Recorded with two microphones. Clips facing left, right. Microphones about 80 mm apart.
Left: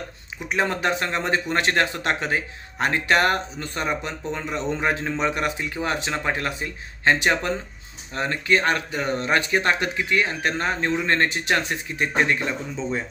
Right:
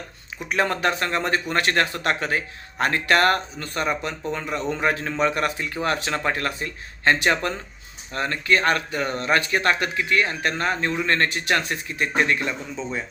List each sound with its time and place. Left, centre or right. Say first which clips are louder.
0.4 s speech: right 1 dB; centre